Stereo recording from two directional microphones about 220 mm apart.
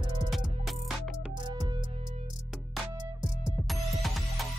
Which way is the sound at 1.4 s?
20° right (ahead or behind).